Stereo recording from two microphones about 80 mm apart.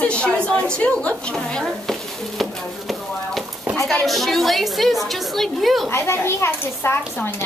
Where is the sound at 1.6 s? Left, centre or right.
Centre.